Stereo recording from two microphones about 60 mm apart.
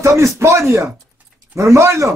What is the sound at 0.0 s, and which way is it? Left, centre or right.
Speech, right.